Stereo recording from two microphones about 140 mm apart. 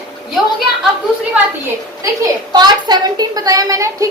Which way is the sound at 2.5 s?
30° right (ahead or behind).